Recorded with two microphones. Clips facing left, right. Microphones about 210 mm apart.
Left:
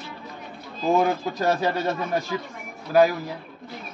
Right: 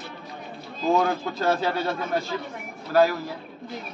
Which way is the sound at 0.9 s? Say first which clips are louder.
Left 1 dB; 15° left (ahead or behind).